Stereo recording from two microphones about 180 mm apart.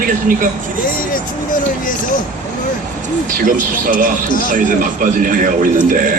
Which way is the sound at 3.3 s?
50° right (ahead or behind).